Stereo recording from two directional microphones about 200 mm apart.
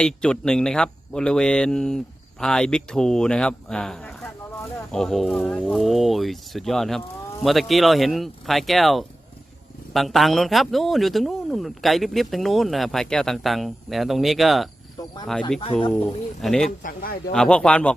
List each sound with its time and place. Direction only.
0.0 s a man's voice: 5° left (ahead or behind)
14.9 s cricket: 20° left (ahead or behind)
15.3 s a man's voice: 5° left (ahead or behind)
16.8 s speech: 45° left (ahead or behind)
17.3 s a man's voice: 5° left (ahead or behind)